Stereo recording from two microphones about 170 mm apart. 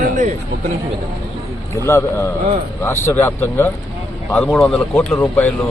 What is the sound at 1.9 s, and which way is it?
A man's voice, 15° left (ahead or behind).